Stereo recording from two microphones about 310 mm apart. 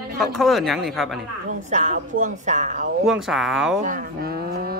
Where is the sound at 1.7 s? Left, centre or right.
Right.